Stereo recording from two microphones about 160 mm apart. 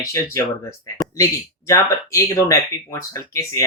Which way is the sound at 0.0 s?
20° left (ahead or behind).